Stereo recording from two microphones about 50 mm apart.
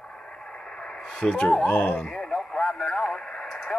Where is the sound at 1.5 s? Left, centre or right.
Left.